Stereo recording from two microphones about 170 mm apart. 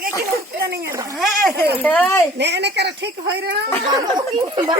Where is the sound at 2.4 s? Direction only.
85° right.